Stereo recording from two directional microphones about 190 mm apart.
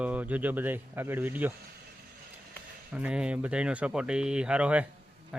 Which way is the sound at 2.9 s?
5° right (ahead or behind).